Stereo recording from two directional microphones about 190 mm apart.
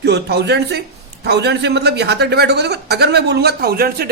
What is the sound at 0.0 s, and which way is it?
A man's voice, 60° right (ahead or behind).